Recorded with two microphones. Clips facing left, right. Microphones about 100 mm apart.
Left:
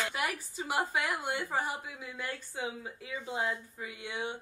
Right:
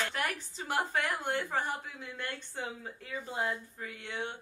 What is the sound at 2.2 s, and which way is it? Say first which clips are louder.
A woman's voice: left 2 dB; 5° left (ahead or behind).